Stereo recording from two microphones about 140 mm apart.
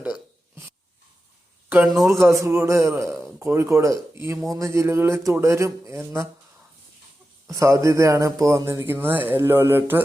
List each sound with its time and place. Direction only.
0.0 s a sound: 15° right (ahead or behind)
2.0 s speech: 20° right (ahead or behind)
7.4 s speech: 20° right (ahead or behind)